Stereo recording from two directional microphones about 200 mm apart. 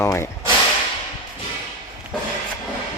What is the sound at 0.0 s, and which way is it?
Speech, 15° left (ahead or behind).